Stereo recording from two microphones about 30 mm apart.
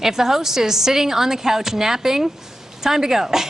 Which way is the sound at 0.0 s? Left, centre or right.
Centre.